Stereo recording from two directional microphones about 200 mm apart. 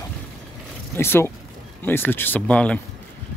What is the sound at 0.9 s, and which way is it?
Speech, 10° left (ahead or behind).